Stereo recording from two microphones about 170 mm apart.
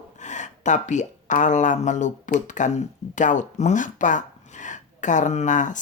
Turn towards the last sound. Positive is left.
turn(degrees=45)  # may be behind; listen again after turning